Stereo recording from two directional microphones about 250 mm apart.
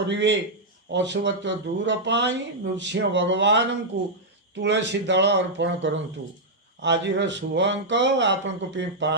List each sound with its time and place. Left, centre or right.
0.0 s speech: right